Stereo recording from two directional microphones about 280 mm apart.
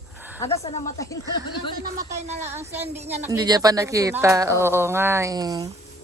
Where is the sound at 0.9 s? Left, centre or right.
Centre.